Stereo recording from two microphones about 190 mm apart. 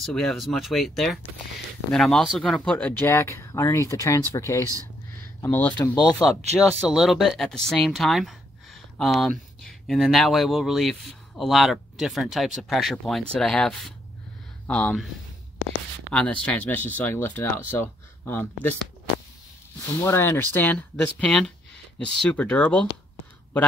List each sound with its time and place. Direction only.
0.0 s speech: 5° left (ahead or behind)
5.7 s speech: 20° left (ahead or behind)
6.2 s speech: centre (ahead or behind)
16.1 s speech: 5° left (ahead or behind)
20.1 s speech: 15° left (ahead or behind)